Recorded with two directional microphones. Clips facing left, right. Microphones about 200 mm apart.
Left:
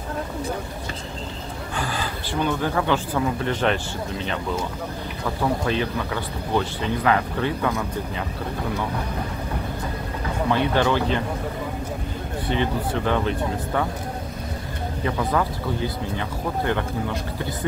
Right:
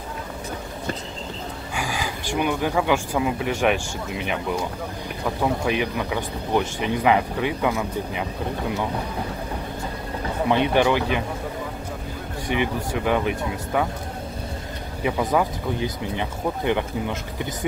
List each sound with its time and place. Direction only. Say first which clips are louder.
1.8 s speech: even; 10° right (ahead or behind)
10.5 s speech: right 2 dB; 15° right (ahead or behind)
12.4 s speech: even; 15° right (ahead or behind)
15.0 s speech: right 2 dB; 15° right (ahead or behind)